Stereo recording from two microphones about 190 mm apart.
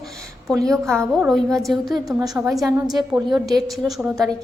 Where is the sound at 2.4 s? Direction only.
15° right (ahead or behind).